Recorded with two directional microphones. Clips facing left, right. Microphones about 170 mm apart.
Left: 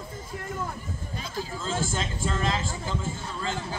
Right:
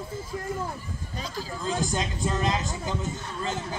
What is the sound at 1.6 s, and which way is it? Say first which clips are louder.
A man's voice: right 3 dB; 15° right (ahead or behind).